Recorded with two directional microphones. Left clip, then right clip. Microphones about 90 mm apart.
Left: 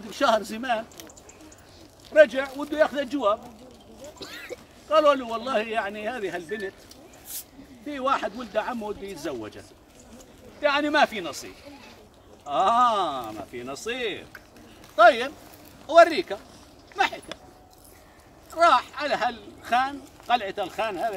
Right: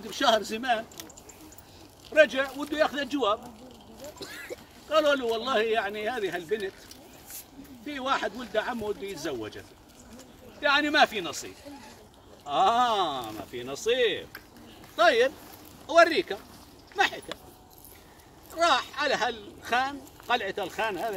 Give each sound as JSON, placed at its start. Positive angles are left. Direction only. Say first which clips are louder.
{"t": 0.1, "sound": "a man's voice", "louder": "left 2 dB", "side_deg": -5}
{"t": 2.1, "sound": "a man's voice", "louder": "left 4 dB", "side_deg": -5}
{"t": 4.2, "sound": "a sound", "louder": "left 2 dB", "side_deg": -90}
{"t": 4.8, "sound": "a man's voice", "louder": "left 4 dB", "side_deg": -5}
{"t": 7.8, "sound": "a man's voice", "louder": "left 3 dB", "side_deg": -5}
{"t": 10.6, "sound": "speech", "louder": "left 1 dB", "side_deg": -5}
{"t": 12.4, "sound": "speech", "louder": "left 3 dB", "side_deg": 0}
{"t": 15.0, "sound": "speech", "louder": "left 4 dB", "side_deg": 20}
{"t": 18.6, "sound": "speech", "louder": "left 5 dB", "side_deg": 10}